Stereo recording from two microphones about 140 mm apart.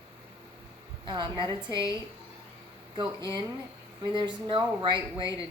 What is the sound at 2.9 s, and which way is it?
Speech, 30° right (ahead or behind).